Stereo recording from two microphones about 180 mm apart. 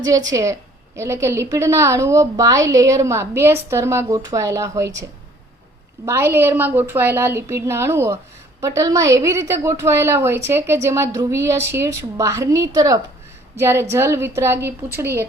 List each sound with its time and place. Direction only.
0.0 s a woman's voice: 20° right (ahead or behind)
6.1 s a woman's voice: 15° right (ahead or behind)